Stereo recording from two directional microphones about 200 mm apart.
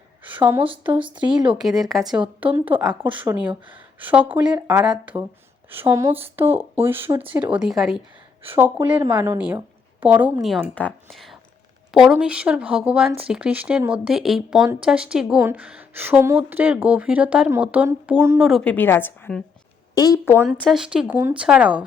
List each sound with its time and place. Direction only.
0.3 s a woman's voice: 10° right (ahead or behind)
3.1 s a woman's voice: 25° right (ahead or behind)
4.0 s a woman's voice: 10° right (ahead or behind); by 20.4 s 15° left (ahead or behind)
20.6 s speech: centre (ahead or behind)